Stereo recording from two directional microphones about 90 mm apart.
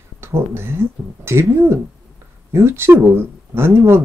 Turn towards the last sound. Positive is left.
turn(degrees=-30)  # may be behind; listen again after turning